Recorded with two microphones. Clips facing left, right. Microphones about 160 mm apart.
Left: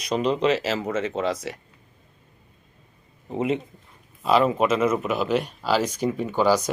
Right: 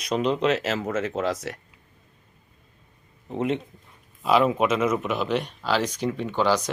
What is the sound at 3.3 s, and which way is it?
Speech, 5° left (ahead or behind).